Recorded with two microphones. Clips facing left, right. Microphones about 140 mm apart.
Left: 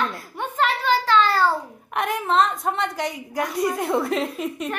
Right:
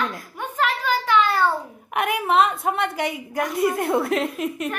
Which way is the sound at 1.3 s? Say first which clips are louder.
Left 1 dB; 20° right (ahead or behind).